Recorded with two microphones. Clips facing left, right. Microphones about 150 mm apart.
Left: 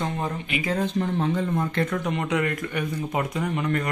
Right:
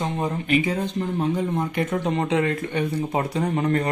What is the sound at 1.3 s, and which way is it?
Speech, 15° right (ahead or behind).